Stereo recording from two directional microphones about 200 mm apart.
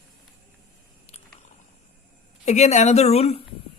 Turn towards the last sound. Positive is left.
turn(degrees=30)  # may be behind; listen again after turning